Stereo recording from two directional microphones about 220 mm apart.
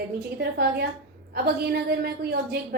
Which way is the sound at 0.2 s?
45° right (ahead or behind).